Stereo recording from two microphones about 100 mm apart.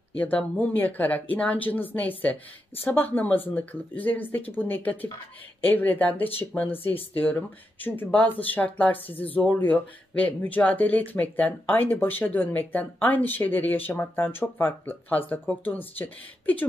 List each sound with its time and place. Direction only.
0.2 s speech: 15° left (ahead or behind)